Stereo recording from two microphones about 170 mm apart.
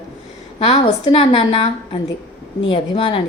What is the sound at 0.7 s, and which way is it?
Speech, 40° left (ahead or behind).